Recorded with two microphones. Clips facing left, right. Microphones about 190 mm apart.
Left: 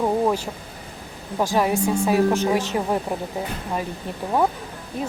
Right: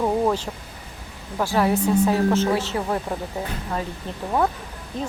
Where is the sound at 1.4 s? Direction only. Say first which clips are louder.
Even; 15° left (ahead or behind).